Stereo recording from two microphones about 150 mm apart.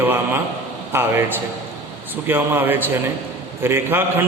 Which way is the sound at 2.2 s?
15° right (ahead or behind).